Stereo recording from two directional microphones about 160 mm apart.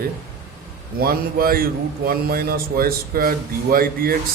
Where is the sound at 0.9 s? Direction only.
70° right (ahead or behind).